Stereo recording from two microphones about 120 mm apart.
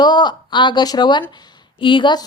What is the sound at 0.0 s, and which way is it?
A woman's voice, 35° left (ahead or behind).